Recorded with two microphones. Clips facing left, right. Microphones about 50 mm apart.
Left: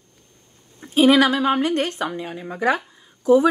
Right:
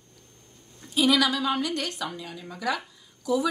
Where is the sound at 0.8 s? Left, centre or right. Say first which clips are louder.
Left 8 dB; left.